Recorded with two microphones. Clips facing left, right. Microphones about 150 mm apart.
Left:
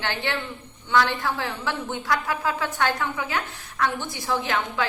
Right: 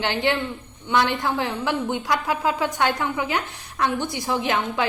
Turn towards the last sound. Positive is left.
turn(degrees=-20)  # may be behind; listen again after turning